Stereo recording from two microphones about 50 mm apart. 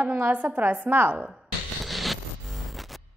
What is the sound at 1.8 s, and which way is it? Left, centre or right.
Zipper, centre.